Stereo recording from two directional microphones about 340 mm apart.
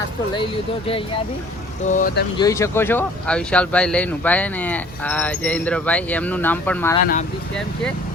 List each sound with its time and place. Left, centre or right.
0.3 s speech: centre
2.4 s speech: centre
7.0 s speech: left